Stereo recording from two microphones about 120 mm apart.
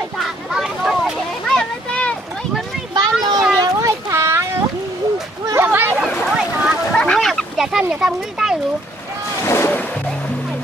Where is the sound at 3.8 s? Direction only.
20° right (ahead or behind).